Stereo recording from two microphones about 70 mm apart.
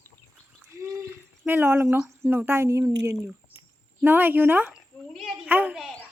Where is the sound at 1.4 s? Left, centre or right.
Right.